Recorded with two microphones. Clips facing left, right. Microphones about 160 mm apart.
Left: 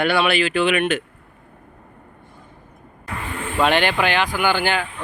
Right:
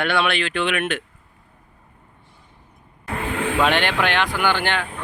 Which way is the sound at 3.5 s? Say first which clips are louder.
Left 3 dB; centre (ahead or behind).